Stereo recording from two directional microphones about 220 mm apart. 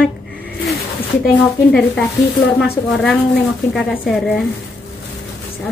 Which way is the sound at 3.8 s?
Centre (ahead or behind).